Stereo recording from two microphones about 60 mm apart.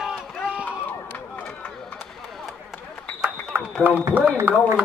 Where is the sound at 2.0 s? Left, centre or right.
Centre.